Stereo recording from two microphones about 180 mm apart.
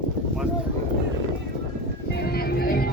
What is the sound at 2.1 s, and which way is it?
Music, 60° left (ahead or behind).